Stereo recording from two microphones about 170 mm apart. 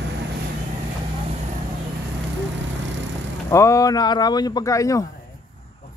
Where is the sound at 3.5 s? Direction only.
20° left (ahead or behind).